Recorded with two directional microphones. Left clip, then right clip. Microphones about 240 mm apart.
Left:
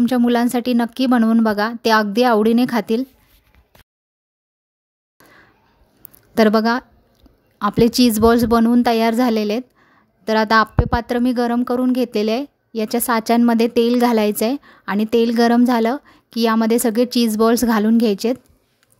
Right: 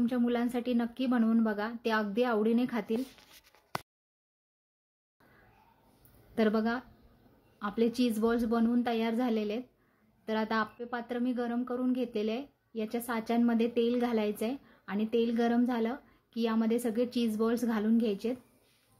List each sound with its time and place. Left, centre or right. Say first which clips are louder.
0.0 s a woman's voice: left 14 dB; left
6.3 s a woman's voice: left 15 dB; left